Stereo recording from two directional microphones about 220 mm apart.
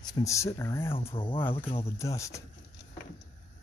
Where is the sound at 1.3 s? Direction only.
10° left (ahead or behind).